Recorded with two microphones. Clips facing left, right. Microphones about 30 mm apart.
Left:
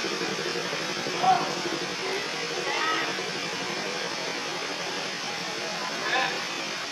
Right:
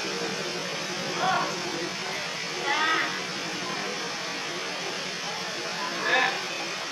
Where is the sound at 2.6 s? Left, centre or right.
Right.